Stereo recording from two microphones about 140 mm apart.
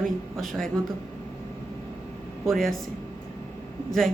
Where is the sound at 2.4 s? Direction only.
Centre (ahead or behind).